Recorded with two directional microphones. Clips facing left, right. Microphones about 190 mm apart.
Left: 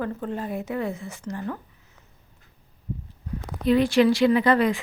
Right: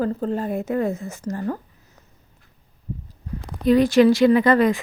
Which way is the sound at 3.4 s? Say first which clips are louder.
Right 4 dB; 40° right (ahead or behind).